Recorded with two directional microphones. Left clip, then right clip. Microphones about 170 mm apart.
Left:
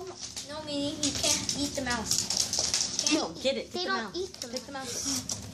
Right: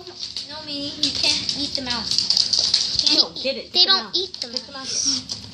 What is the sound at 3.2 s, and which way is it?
Speech, 15° left (ahead or behind).